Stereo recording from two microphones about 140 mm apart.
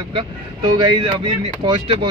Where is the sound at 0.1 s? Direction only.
30° right (ahead or behind).